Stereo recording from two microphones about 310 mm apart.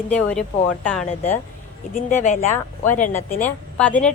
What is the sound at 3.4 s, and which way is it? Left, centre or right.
Speech, centre.